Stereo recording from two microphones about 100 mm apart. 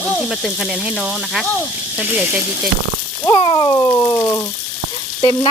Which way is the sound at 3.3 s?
55° left (ahead or behind).